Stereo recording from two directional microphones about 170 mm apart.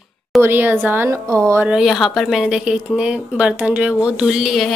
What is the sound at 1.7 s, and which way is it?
A woman's voice, centre (ahead or behind).